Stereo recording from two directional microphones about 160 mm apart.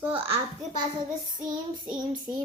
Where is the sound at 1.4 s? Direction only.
30° right (ahead or behind).